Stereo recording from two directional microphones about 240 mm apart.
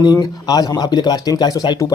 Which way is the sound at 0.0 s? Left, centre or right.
Centre.